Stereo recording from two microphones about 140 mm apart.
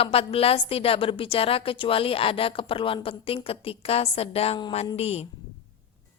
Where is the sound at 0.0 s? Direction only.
40° left (ahead or behind).